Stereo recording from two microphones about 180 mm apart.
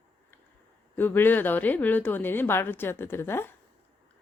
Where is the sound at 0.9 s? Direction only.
10° left (ahead or behind).